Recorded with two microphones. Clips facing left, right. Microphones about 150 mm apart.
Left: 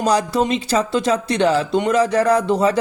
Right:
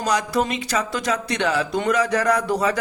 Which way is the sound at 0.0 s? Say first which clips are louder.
Left 4 dB; 30° left (ahead or behind).